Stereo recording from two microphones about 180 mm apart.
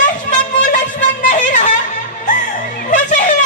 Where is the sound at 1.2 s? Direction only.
45° left (ahead or behind).